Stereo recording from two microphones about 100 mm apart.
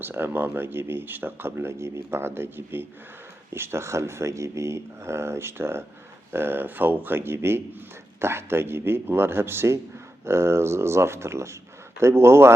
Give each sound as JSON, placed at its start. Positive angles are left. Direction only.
{"t": 0.0, "sound": "speech", "side_deg": -20}